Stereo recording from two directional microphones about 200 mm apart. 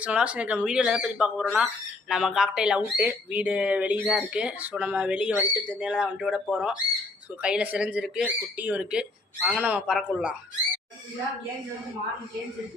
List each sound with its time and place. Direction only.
0.0 s speech: 5° right (ahead or behind)